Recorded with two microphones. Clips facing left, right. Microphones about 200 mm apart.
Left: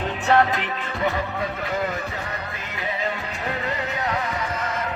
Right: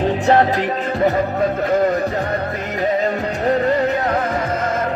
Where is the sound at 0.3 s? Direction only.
35° right (ahead or behind).